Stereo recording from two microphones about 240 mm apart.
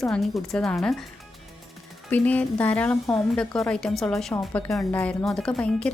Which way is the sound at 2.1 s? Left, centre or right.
Centre.